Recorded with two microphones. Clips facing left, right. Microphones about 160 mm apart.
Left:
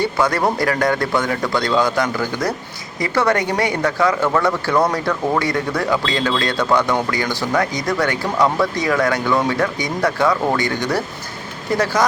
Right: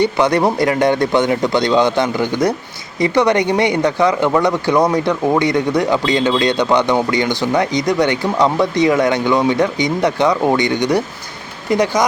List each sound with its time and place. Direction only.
0.0 s speech: 20° right (ahead or behind)